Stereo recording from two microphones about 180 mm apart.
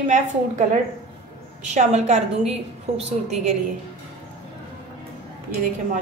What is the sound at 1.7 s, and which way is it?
A woman's voice, 40° right (ahead or behind).